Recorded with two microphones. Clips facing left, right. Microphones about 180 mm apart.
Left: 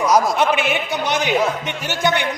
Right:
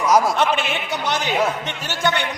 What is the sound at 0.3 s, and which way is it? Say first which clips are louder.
A man's voice: left 2 dB; 10° left (ahead or behind).